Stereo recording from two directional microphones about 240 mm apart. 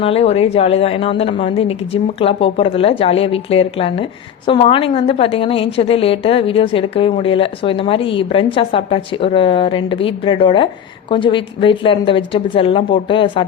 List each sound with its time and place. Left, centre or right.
0.0 s a woman's voice: left